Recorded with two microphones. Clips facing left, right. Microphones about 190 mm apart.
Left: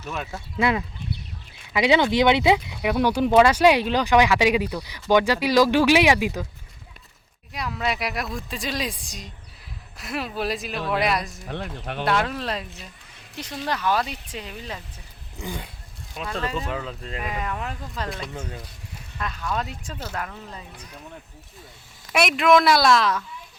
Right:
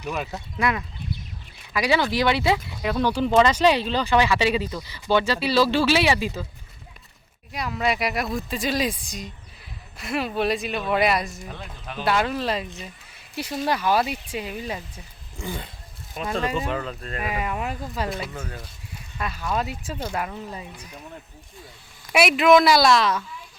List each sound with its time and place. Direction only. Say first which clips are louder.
0.2 s speech: right 2 dB; centre (ahead or behind)
0.6 s speech: left 3 dB; 25° left (ahead or behind)
7.5 s speech: right 2 dB; centre (ahead or behind)
11.4 s speech: left 5 dB; 65° left (ahead or behind)
12.0 s speech: right 2 dB; centre (ahead or behind)
15.4 s speech: right 1 dB; 15° left (ahead or behind)
16.3 s speech: right 3 dB; 15° right (ahead or behind)
16.6 s speech: right 2 dB; centre (ahead or behind)
17.2 s speech: right 2 dB; 10° right (ahead or behind)
22.1 s speech: right 2 dB; 5° right (ahead or behind)